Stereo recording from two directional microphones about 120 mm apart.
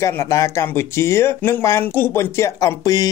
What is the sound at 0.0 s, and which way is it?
Speech, 25° left (ahead or behind).